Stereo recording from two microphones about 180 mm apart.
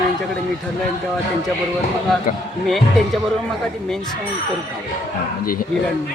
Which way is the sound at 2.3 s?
50° left (ahead or behind).